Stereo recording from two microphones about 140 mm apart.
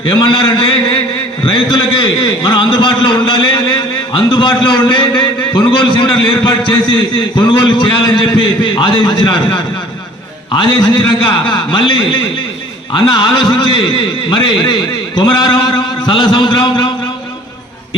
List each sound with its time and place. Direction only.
0.0 s a man's voice: 35° left (ahead or behind)